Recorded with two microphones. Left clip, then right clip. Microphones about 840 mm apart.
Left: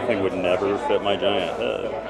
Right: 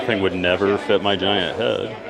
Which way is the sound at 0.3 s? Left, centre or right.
Right.